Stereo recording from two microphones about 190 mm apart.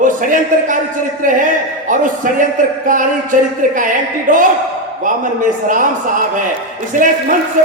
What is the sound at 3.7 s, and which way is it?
A man's voice, 45° right (ahead or behind).